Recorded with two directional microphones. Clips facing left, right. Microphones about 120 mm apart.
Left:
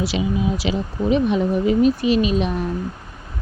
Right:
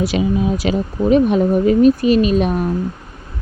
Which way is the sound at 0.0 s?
50° right (ahead or behind).